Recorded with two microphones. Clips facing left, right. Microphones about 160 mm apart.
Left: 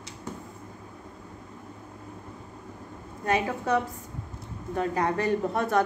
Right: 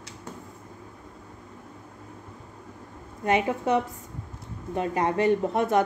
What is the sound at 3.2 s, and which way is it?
A woman's voice, 20° right (ahead or behind).